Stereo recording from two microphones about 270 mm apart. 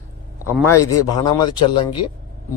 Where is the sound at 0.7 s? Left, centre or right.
Left.